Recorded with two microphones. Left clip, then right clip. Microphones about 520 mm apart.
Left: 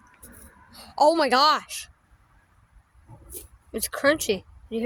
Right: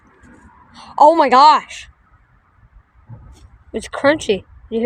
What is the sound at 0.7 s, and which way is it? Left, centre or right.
A woman's voice, left.